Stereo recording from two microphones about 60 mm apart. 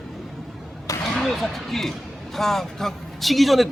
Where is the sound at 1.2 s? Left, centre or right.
Centre.